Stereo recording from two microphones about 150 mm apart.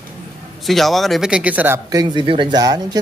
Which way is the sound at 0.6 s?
Centre (ahead or behind).